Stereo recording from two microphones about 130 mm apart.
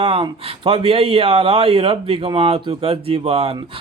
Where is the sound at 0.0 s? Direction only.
45° right (ahead or behind).